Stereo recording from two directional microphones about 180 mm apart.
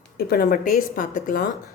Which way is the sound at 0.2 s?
60° left (ahead or behind).